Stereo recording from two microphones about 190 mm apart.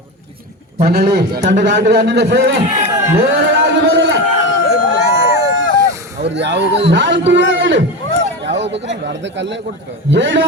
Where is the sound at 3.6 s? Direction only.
70° right (ahead or behind).